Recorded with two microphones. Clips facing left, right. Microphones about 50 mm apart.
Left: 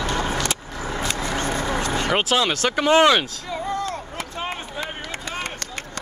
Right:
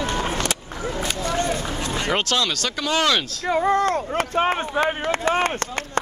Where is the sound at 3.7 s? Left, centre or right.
Right.